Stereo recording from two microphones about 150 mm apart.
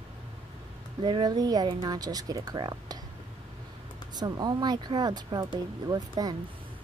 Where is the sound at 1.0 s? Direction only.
30° right (ahead or behind).